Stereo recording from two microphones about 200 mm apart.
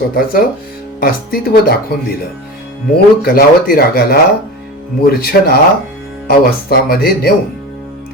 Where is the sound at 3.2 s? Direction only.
50° left (ahead or behind).